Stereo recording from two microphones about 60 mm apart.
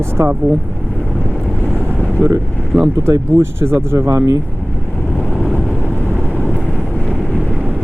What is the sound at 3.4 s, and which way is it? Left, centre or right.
Speech, right.